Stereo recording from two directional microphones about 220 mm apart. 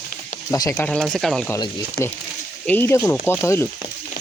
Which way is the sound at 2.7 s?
10° left (ahead or behind).